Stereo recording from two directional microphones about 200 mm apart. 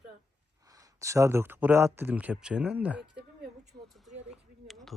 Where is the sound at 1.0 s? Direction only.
15° right (ahead or behind).